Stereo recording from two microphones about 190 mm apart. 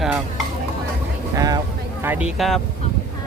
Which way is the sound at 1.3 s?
20° right (ahead or behind).